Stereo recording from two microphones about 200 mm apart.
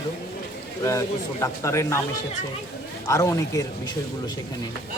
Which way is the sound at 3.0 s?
15° left (ahead or behind).